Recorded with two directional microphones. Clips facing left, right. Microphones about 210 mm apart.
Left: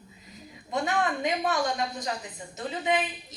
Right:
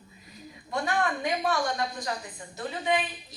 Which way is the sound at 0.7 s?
20° left (ahead or behind).